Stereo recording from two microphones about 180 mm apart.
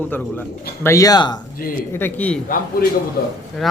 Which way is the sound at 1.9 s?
10° left (ahead or behind).